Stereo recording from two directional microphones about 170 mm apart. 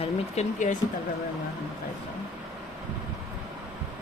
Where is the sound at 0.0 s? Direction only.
45° left (ahead or behind).